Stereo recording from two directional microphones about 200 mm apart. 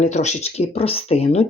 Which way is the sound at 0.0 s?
35° left (ahead or behind).